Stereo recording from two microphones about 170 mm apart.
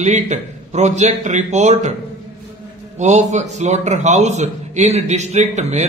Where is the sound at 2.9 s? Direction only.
40° right (ahead or behind).